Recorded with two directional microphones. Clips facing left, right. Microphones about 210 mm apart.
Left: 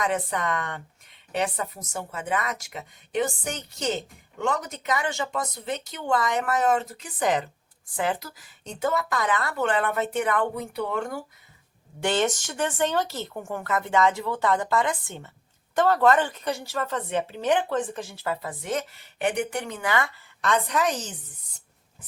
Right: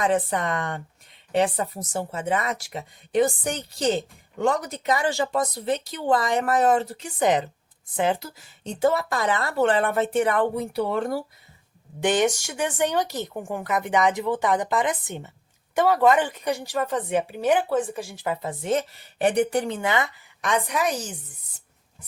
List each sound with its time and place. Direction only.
0.0 s speech: 30° right (ahead or behind)
12.0 s speech: 15° right (ahead or behind)
19.2 s a woman's voice: 35° right (ahead or behind); by 21.2 s 10° right (ahead or behind)